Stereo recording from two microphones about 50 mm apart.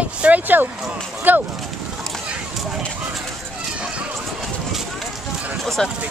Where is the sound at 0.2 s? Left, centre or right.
Right.